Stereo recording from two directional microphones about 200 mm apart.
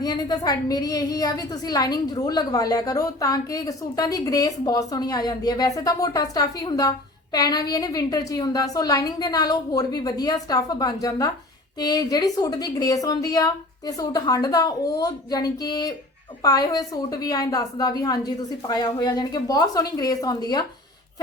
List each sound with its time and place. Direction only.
0.0 s a woman's voice: 20° left (ahead or behind)